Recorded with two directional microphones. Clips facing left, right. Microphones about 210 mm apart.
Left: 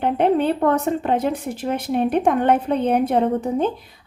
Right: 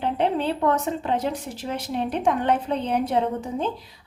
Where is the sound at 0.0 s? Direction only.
55° left (ahead or behind).